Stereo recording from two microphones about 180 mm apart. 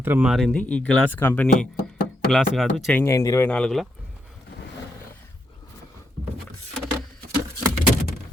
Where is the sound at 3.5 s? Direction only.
5° left (ahead or behind).